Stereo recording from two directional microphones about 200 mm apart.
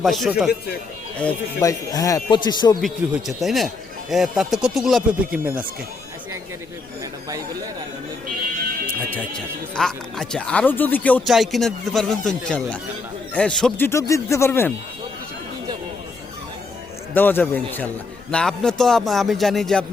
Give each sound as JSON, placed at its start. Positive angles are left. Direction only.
{"t": 0.0, "sound": "speech", "side_deg": 0}
{"t": 1.6, "sound": "a man's voice", "side_deg": 15}
{"t": 2.8, "sound": "speech", "side_deg": 0}
{"t": 9.0, "sound": "speech", "side_deg": 5}
{"t": 17.2, "sound": "speech", "side_deg": 10}